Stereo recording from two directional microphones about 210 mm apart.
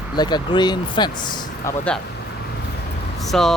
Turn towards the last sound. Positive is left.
turn(degrees=0)  # may be behind; listen again after turning